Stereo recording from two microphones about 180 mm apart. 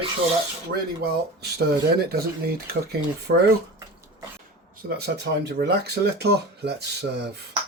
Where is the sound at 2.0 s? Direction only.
60° right (ahead or behind).